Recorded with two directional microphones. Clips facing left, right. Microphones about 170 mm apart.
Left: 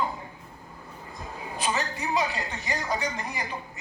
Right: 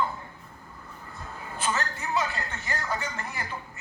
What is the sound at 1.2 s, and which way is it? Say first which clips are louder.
A woman's voice: left 2 dB; 15° left (ahead or behind).